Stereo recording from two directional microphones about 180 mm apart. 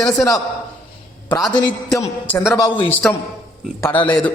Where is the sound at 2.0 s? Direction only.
10° left (ahead or behind).